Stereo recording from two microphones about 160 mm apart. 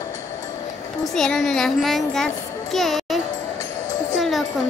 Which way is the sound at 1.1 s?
Centre (ahead or behind).